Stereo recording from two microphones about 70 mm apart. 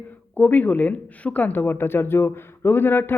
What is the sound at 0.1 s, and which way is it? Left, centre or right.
A woman's voice, left.